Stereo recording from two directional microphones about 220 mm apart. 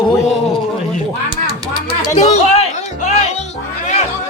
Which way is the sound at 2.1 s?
30° left (ahead or behind).